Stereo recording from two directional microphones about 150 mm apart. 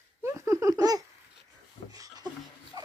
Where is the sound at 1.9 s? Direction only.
25° right (ahead or behind).